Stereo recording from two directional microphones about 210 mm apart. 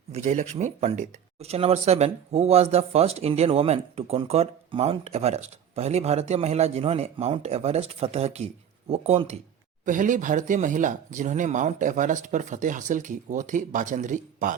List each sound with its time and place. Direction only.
0.1 s speech: 35° right (ahead or behind)